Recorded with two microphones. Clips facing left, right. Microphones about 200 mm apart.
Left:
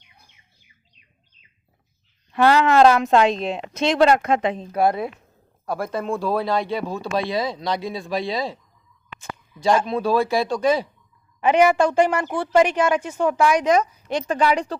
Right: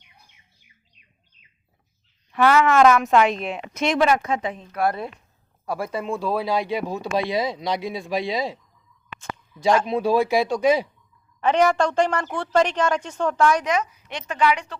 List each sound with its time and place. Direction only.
2.3 s a woman's voice: 35° left (ahead or behind)
4.8 s a woman's voice: 15° left (ahead or behind)
5.6 s speech: 5° right (ahead or behind)
9.8 s speech: 20° right (ahead or behind)
11.3 s a woman's voice: 10° left (ahead or behind)
13.7 s a woman's voice: 35° left (ahead or behind)